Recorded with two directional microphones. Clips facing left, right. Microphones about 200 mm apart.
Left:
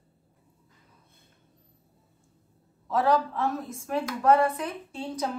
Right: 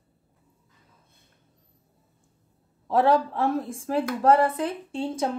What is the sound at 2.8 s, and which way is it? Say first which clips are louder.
A woman's voice: right 3 dB; 30° right (ahead or behind).